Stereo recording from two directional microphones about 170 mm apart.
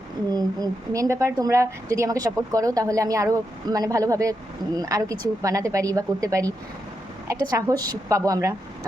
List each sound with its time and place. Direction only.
0.3 s a woman's voice: 20° right (ahead or behind)